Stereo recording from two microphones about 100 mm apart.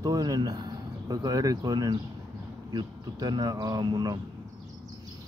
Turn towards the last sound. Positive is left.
turn(degrees=-45)  # may be behind; listen again after turning